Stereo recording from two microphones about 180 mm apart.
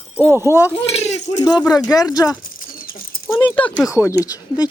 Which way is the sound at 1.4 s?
20° left (ahead or behind).